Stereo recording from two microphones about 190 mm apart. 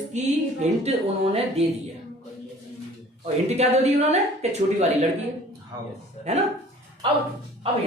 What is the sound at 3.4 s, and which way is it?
Speech, 35° right (ahead or behind).